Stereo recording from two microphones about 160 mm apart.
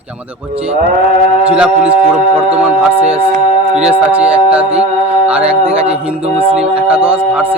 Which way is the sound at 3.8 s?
10° right (ahead or behind).